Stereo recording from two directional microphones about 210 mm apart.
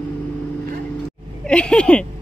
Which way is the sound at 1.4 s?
5° left (ahead or behind).